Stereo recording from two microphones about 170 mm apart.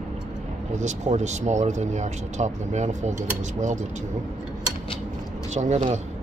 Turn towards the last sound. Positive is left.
turn(degrees=-40)  # may be behind; listen again after turning